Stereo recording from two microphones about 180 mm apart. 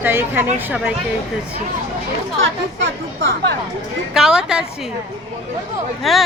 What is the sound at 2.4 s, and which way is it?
Speech, 90° right.